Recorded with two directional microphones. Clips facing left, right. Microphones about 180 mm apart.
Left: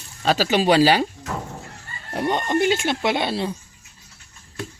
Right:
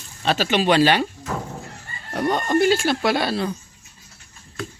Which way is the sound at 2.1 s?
25° left (ahead or behind).